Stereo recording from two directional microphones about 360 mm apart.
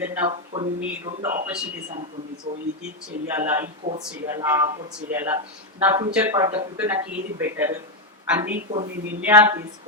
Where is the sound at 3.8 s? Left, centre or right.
Right.